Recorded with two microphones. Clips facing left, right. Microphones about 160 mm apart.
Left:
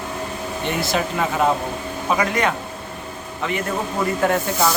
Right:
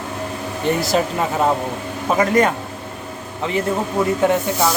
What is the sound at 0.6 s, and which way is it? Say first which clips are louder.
Speech: right 5 dB; 40° right (ahead or behind).